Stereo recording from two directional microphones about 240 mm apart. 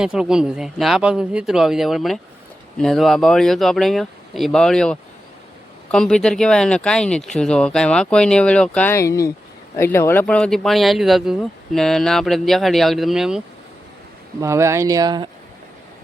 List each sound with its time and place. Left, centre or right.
0.0 s speech: centre
14.4 s speech: centre